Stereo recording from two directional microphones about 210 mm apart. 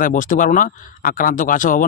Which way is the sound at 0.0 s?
40° left (ahead or behind).